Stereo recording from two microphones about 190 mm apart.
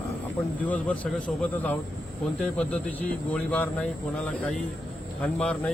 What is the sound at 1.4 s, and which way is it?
Speech, 5° left (ahead or behind).